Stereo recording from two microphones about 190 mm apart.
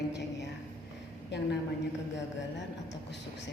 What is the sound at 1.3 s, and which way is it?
Speech, 65° left (ahead or behind).